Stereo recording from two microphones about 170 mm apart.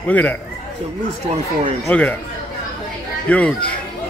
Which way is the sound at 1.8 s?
5° left (ahead or behind).